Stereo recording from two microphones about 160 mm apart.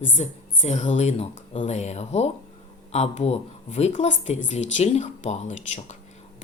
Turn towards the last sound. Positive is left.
turn(degrees=45)  # may be behind; listen again after turning